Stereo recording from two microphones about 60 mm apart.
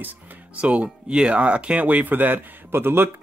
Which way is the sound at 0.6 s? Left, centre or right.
Right.